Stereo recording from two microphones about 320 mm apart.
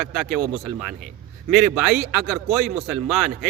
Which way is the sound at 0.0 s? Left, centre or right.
Centre.